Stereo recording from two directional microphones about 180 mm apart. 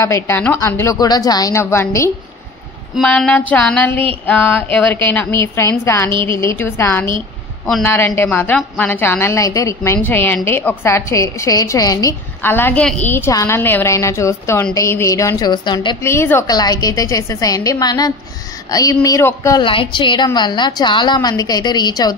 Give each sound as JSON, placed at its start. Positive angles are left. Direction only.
{"t": 0.0, "sound": "a woman's voice", "side_deg": 15}
{"t": 3.0, "sound": "a woman's voice", "side_deg": 5}
{"t": 16.0, "sound": "a woman's voice", "side_deg": 15}
{"t": 19.6, "sound": "a woman's voice", "side_deg": 30}